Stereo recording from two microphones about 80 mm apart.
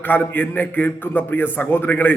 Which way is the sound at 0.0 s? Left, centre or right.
Left.